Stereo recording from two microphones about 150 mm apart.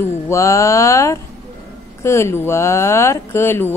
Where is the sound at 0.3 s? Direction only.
20° left (ahead or behind).